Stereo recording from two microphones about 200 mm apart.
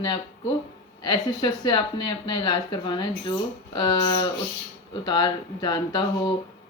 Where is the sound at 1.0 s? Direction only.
20° left (ahead or behind).